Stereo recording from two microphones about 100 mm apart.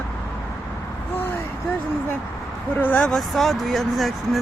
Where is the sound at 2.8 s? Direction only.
15° left (ahead or behind).